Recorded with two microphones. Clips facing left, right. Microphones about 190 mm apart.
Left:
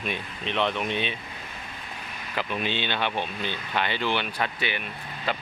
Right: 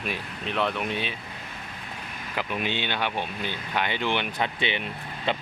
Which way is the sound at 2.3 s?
15° right (ahead or behind).